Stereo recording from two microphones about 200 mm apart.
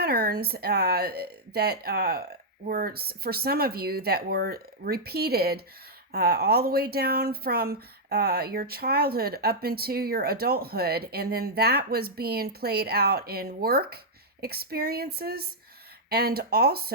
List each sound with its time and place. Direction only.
0.0 s speech: 50° right (ahead or behind)